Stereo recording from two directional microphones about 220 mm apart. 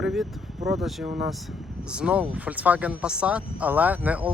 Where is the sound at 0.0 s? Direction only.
5° right (ahead or behind).